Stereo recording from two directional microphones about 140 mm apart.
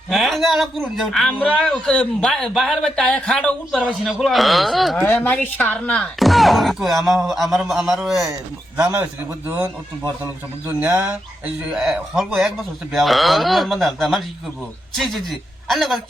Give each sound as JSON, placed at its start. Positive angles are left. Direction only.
{"t": 0.1, "sound": "a man's voice", "side_deg": 0}
{"t": 4.9, "sound": "a man's voice", "side_deg": 15}
{"t": 8.3, "sound": "speech", "side_deg": -15}
{"t": 10.7, "sound": "a man's voice", "side_deg": -10}